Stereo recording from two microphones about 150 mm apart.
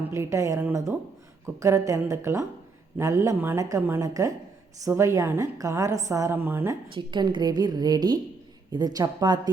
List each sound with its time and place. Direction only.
0.1 s a woman's voice: 20° right (ahead or behind)
6.9 s a woman's voice: 30° right (ahead or behind)